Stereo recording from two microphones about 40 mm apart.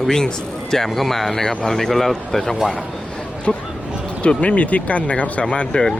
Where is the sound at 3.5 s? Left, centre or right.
Centre.